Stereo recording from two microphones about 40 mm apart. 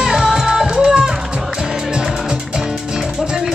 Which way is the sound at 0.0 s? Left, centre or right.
Centre.